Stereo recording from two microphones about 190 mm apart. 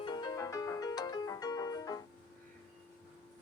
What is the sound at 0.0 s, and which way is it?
Music, 25° left (ahead or behind).